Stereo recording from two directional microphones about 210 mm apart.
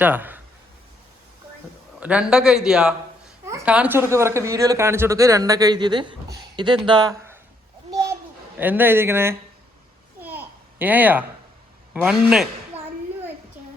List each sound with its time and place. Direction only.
0.0 s speech: 10° right (ahead or behind)
2.0 s a man's voice: 5° right (ahead or behind)
7.9 s a sound: 15° right (ahead or behind)
8.5 s a woman's voice: 10° right (ahead or behind)
10.2 s babbling: 10° right (ahead or behind)
11.9 s a man's voice: 5° right (ahead or behind)
13.6 s a sound: 10° right (ahead or behind)